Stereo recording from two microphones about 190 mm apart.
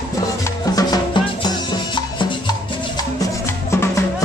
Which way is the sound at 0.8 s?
20° left (ahead or behind).